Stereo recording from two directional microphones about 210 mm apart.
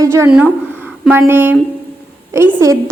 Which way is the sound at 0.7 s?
10° right (ahead or behind).